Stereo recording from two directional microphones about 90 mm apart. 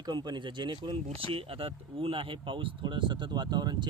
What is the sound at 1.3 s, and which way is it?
Speech, 90° right.